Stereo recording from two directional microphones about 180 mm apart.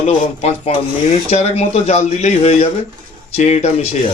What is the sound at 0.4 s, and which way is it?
Speech, 35° left (ahead or behind).